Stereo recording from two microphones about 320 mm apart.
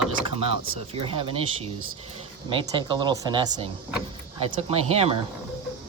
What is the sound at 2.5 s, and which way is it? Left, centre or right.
Speech, centre.